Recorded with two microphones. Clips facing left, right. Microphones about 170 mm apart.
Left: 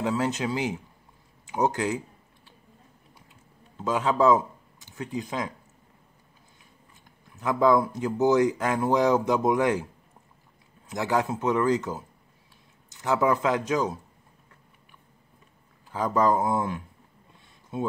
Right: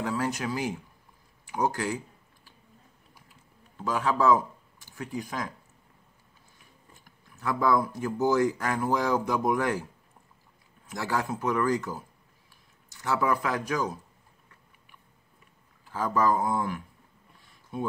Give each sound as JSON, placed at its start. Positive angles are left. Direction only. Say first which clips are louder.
{"t": 0.0, "sound": "speech", "louder": "left 3 dB", "side_deg": 20}
{"t": 3.8, "sound": "speech", "louder": "left 3 dB", "side_deg": 20}
{"t": 7.1, "sound": "speech", "louder": "left 3 dB", "side_deg": 20}
{"t": 10.9, "sound": "speech", "louder": "left 4 dB", "side_deg": 20}
{"t": 15.9, "sound": "speech", "louder": "left 2 dB", "side_deg": 20}